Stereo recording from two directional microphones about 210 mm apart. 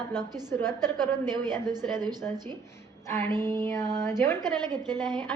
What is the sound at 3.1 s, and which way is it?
Speech, 10° left (ahead or behind).